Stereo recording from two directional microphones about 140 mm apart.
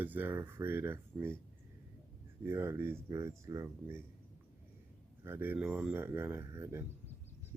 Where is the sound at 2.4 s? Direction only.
20° right (ahead or behind).